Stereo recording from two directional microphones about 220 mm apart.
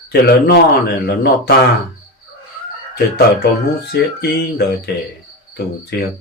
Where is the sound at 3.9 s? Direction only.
50° left (ahead or behind).